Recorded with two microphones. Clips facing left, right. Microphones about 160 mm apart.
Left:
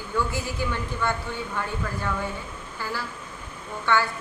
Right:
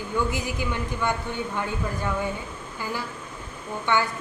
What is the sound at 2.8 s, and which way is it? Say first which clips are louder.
A woman's voice: right 1 dB; 15° right (ahead or behind).